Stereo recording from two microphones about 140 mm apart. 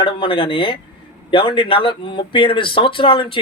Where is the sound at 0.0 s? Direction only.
35° left (ahead or behind).